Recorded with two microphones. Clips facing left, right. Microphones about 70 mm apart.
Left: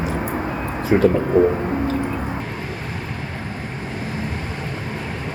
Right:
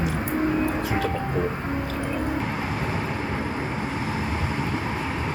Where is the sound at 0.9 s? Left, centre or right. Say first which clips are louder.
Left 15 dB; left.